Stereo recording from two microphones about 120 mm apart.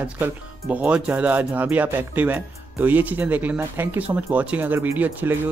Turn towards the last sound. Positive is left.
turn(degrees=-15)  # may be behind; listen again after turning